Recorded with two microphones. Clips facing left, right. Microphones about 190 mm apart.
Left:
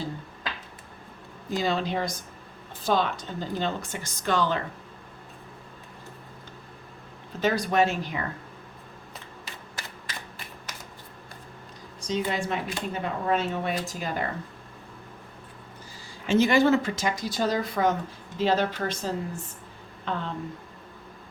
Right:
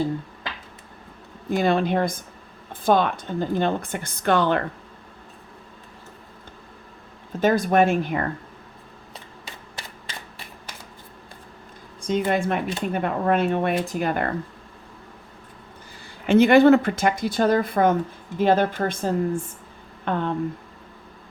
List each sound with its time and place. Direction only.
1.5 s speech: 55° right (ahead or behind)
7.3 s a woman's voice: 50° right (ahead or behind)
9.7 s a sound: 30° right (ahead or behind)
12.0 s speech: 55° right (ahead or behind)
16.2 s a woman's voice: 60° right (ahead or behind)